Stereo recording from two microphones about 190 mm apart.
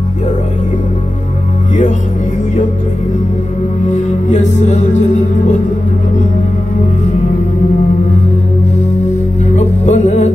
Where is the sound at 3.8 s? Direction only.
40° left (ahead or behind).